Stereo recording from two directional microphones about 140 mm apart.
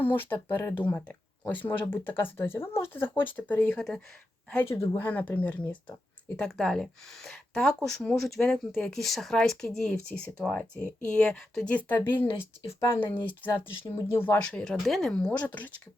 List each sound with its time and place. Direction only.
0.0 s speech: 15° left (ahead or behind)
4.6 s speech: 20° left (ahead or behind)